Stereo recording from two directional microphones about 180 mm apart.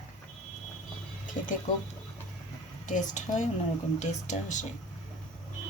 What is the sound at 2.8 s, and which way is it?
A woman's voice, 45° left (ahead or behind).